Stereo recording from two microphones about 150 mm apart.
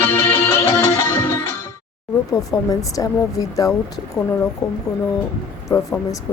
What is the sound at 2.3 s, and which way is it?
Speech, 20° left (ahead or behind).